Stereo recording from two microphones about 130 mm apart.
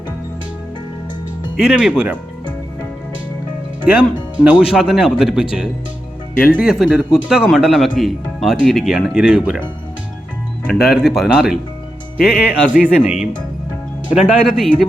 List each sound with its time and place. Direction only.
1.5 s speech: 5° right (ahead or behind)
3.8 s speech: 10° right (ahead or behind)
10.8 s speech: 5° right (ahead or behind)